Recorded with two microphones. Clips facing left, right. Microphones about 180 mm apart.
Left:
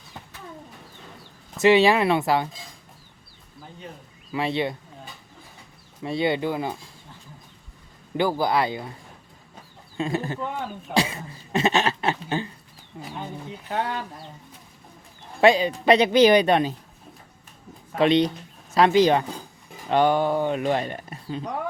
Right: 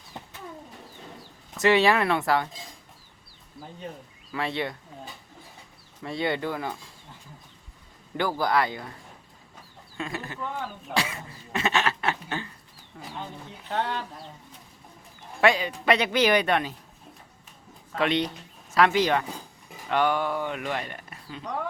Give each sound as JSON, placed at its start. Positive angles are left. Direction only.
{"t": 1.5, "sound": "speech", "side_deg": 25}
{"t": 4.3, "sound": "speech", "side_deg": 20}
{"t": 6.0, "sound": "speech", "side_deg": 20}
{"t": 8.1, "sound": "speech", "side_deg": 25}
{"t": 10.0, "sound": "speech", "side_deg": 30}
{"t": 13.2, "sound": "speech", "side_deg": 10}
{"t": 15.4, "sound": "speech", "side_deg": 30}
{"t": 18.0, "sound": "speech", "side_deg": 35}